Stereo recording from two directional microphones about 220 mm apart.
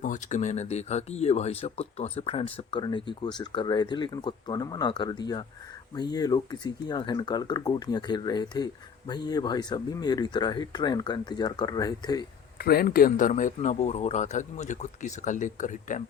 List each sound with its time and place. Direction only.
0.0 s speech: 35° left (ahead or behind); by 12.2 s 15° left (ahead or behind)
12.5 s speech: 45° left (ahead or behind)